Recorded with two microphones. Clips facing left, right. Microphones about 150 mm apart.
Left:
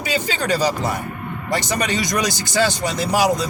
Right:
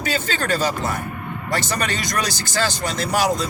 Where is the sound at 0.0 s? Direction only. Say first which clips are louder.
Left 1 dB; 15° left (ahead or behind).